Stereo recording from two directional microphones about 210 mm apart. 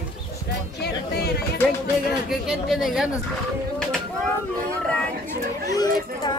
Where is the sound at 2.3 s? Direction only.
Centre (ahead or behind).